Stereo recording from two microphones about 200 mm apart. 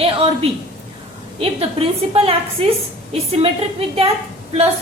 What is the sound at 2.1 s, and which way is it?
A woman's voice, 30° right (ahead or behind).